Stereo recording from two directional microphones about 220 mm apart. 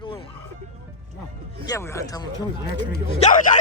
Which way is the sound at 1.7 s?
15° left (ahead or behind).